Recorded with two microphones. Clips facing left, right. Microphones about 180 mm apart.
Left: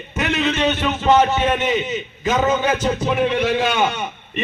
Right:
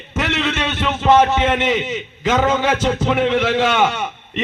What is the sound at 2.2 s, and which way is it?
A man's voice, 90° right.